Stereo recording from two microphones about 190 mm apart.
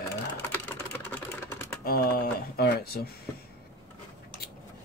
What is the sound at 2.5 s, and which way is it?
Speech, 55° left (ahead or behind).